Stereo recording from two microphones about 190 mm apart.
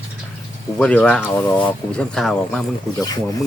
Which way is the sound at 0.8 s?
5° left (ahead or behind).